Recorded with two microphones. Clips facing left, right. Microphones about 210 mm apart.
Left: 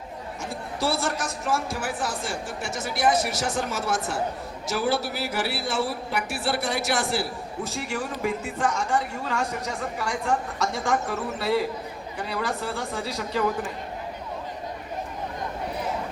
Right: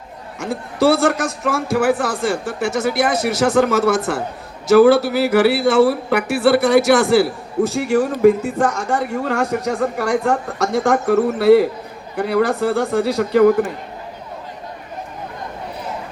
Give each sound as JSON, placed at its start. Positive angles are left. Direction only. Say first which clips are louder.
{"t": 0.3, "sound": "a man's voice", "louder": "right 12 dB", "side_deg": -75}
{"t": 7.8, "sound": "a woman's voice", "louder": "right 14 dB", "side_deg": -60}